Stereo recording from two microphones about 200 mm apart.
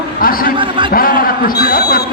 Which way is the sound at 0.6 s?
25° right (ahead or behind).